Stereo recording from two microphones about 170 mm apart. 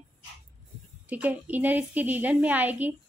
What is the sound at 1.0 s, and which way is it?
A woman's voice, 10° right (ahead or behind).